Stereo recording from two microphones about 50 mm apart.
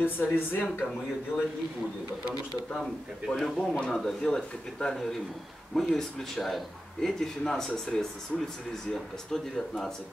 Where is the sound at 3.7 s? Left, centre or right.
Left.